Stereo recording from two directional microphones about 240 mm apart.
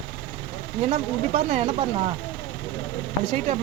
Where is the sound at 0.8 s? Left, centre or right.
Right.